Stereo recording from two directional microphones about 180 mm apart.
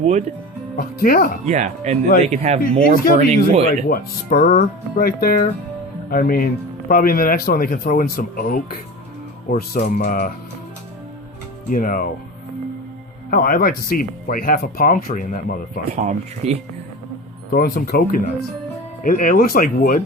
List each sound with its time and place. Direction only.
0.0 s speech: 40° right (ahead or behind)
0.8 s speech: 55° left (ahead or behind)
1.5 s speech: 40° right (ahead or behind)
3.8 s speech: 55° left (ahead or behind)
11.7 s speech: 50° left (ahead or behind)
13.3 s speech: 55° left (ahead or behind)
15.9 s speech: 40° right (ahead or behind)
17.5 s speech: 60° left (ahead or behind)
19.0 s speech: 50° left (ahead or behind)